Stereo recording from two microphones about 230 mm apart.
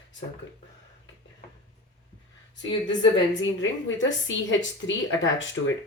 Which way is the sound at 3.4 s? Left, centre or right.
Left.